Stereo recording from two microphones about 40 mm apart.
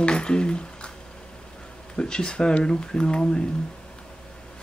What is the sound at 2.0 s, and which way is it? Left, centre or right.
Speech, left.